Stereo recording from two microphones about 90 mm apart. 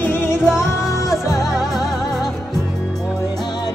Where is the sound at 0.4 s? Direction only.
5° right (ahead or behind).